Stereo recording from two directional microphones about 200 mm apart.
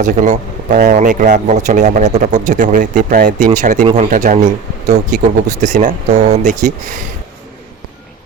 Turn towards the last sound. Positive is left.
turn(degrees=-40)  # may be behind; listen again after turning